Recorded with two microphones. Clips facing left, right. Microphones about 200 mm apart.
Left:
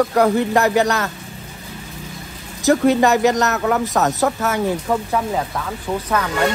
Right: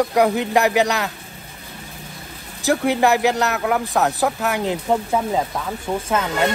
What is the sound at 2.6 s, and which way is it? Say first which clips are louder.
Speech: left 3 dB; 10° right (ahead or behind).